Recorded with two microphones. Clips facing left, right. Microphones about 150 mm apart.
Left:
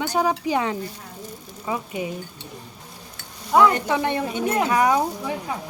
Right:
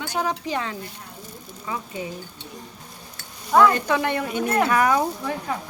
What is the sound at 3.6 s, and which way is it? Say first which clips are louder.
Speech: even; 20° left (ahead or behind).